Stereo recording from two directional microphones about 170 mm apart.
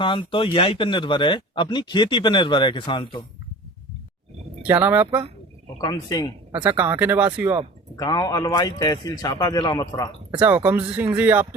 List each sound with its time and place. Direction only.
0.0 s speech: 30° left (ahead or behind)
4.7 s speech: 10° right (ahead or behind)
5.8 s speech: 20° left (ahead or behind)
6.5 s speech: 10° right (ahead or behind)
7.9 s speech: 25° left (ahead or behind)
10.4 s speech: 10° right (ahead or behind)